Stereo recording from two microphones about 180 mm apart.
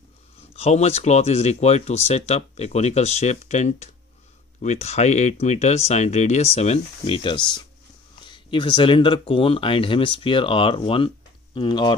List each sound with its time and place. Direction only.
0.6 s speech: 35° left (ahead or behind)